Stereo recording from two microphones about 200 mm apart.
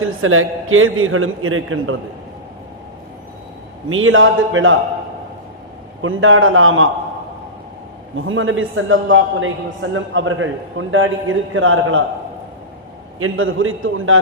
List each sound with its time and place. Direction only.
0.0 s a man's voice: 90° right
3.8 s a man's voice: 80° right
6.0 s a man's voice: 85° right
8.1 s a man's voice: 80° right
13.1 s a man's voice: 90° right